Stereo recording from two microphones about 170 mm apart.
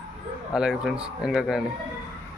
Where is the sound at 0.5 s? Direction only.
Centre (ahead or behind).